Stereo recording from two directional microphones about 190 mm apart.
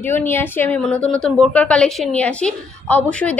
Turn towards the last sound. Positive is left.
turn(degrees=5)  # may be behind; listen again after turning